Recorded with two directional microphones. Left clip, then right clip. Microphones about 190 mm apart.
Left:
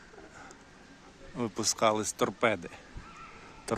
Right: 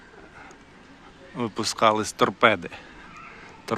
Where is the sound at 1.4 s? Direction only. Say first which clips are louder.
Right 6 dB; 15° left (ahead or behind).